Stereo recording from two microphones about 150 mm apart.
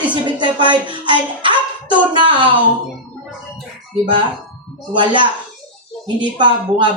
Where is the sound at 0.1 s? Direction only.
30° right (ahead or behind).